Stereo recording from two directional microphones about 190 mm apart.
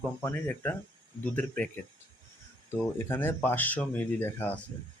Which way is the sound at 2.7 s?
10° left (ahead or behind).